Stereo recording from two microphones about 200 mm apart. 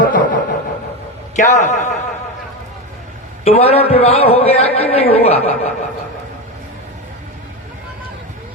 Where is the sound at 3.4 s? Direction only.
30° left (ahead or behind).